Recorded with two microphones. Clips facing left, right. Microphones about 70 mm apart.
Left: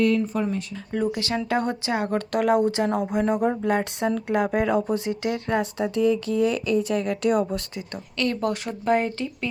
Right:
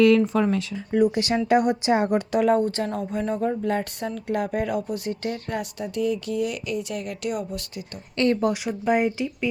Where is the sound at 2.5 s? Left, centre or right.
Centre; by 8.0 s left.